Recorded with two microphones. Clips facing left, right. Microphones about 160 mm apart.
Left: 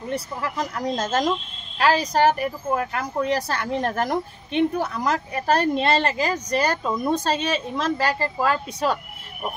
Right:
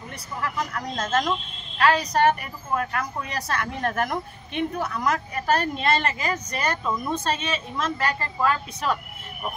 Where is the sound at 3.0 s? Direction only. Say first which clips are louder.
Left 7 dB; 30° left (ahead or behind).